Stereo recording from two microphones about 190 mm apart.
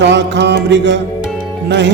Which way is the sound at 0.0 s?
65° right (ahead or behind).